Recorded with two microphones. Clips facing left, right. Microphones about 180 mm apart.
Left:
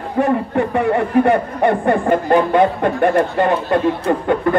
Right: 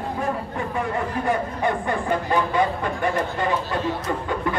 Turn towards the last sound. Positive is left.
turn(degrees=60)  # may be behind; listen again after turning